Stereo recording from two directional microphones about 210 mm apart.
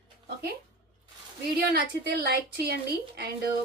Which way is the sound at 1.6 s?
50° right (ahead or behind).